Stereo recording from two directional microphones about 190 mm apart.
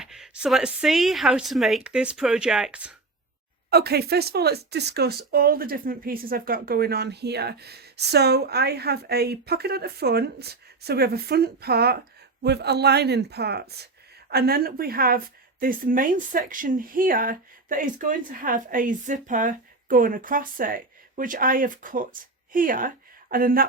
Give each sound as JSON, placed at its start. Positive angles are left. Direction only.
{"t": 0.0, "sound": "a woman's voice", "side_deg": -5}
{"t": 3.7, "sound": "speech", "side_deg": -55}